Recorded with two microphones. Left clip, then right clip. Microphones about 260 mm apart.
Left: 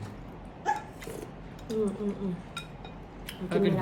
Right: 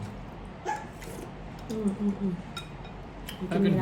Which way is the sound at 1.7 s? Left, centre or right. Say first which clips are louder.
Left 5 dB; centre.